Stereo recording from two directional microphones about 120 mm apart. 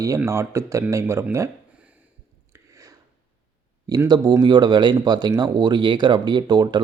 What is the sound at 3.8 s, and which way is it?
Speech, 30° right (ahead or behind).